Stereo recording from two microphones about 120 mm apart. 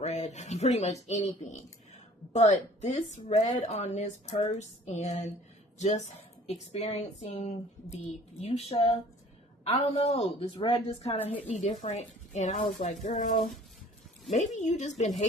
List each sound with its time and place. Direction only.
0.0 s a woman's voice: 70° left (ahead or behind)
6.5 s a woman's voice: 65° left (ahead or behind)
8.4 s a woman's voice: 60° left (ahead or behind)
11.8 s speech: 75° left (ahead or behind); by 13.5 s 90° left
14.3 s a woman's voice: 80° left